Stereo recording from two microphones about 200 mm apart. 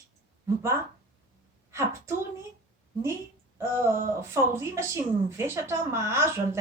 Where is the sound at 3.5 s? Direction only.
15° right (ahead or behind).